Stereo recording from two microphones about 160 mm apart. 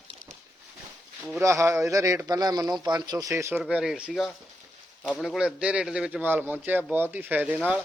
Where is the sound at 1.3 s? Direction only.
15° right (ahead or behind).